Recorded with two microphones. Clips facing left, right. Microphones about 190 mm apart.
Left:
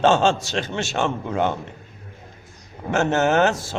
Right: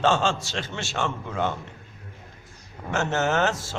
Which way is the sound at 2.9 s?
15° left (ahead or behind).